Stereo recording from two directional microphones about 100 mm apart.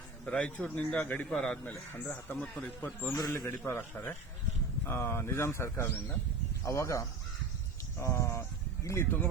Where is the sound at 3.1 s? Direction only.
30° left (ahead or behind).